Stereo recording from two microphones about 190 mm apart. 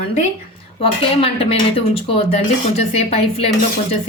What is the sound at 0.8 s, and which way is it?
Speech, 30° left (ahead or behind).